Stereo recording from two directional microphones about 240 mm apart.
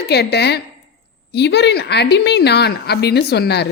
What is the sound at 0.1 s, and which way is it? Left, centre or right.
Speech, left.